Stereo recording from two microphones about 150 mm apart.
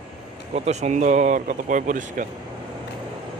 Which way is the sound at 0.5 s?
45° right (ahead or behind).